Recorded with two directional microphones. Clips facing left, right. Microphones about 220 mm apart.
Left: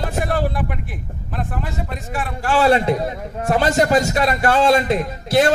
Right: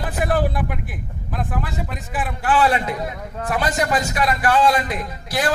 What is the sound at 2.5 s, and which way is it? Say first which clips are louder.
A man's voice: left 4 dB; 30° left (ahead or behind).